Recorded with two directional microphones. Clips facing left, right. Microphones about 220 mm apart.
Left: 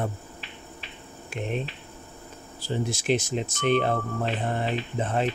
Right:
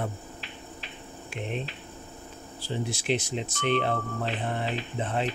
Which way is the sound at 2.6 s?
45° left (ahead or behind).